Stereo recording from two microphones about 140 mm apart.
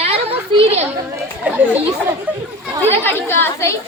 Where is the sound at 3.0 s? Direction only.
15° left (ahead or behind).